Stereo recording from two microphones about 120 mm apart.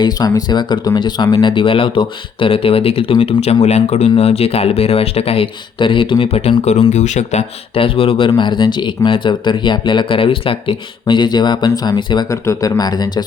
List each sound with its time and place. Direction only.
0.0 s speech: 30° left (ahead or behind); by 3.6 s 50° left (ahead or behind)
3.6 s speech: 70° left (ahead or behind)
7.8 s speech: 50° left (ahead or behind)
12.3 s speech: 30° left (ahead or behind)